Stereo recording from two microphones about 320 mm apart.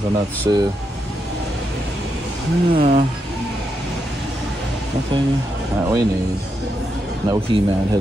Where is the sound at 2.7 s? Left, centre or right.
Right.